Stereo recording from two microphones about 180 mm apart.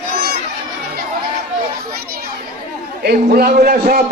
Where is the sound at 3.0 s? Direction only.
60° right (ahead or behind).